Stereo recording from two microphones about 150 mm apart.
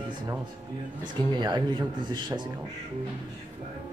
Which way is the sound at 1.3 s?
30° right (ahead or behind).